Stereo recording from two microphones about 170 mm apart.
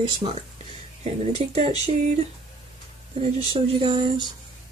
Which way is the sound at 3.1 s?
40° right (ahead or behind).